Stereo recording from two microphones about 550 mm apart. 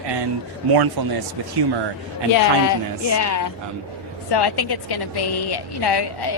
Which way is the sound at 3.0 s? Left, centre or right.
Left.